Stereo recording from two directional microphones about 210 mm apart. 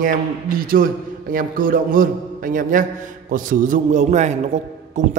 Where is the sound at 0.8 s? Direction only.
45° right (ahead or behind).